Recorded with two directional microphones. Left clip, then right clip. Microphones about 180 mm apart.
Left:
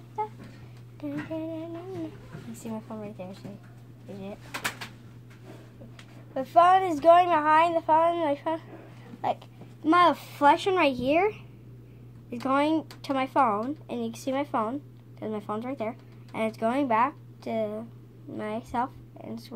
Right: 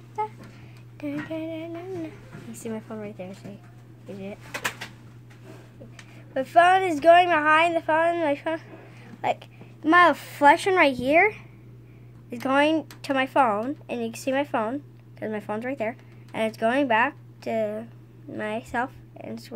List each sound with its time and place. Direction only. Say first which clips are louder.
1.0 s female singing: right 2 dB; 30° right (ahead or behind)
2.5 s a woman's voice: right 4 dB; 30° right (ahead or behind)
6.3 s a woman's voice: right 2 dB; 30° right (ahead or behind)
9.8 s a woman's voice: right 3 dB; 30° right (ahead or behind)